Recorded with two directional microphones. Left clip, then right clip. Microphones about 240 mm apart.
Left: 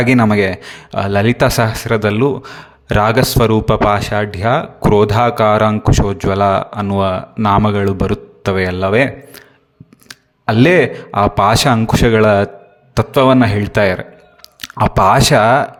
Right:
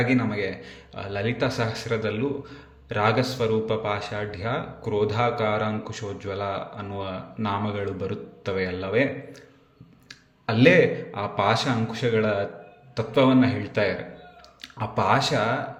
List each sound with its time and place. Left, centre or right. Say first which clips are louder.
0.0 s speech: left 12 dB; left